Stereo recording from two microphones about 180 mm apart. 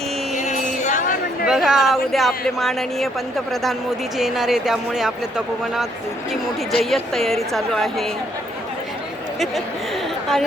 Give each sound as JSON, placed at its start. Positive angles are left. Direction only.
{"t": 0.3, "sound": "a sound", "side_deg": 40}
{"t": 1.5, "sound": "a woman's voice", "side_deg": -5}
{"t": 6.7, "sound": "a woman's voice", "side_deg": 0}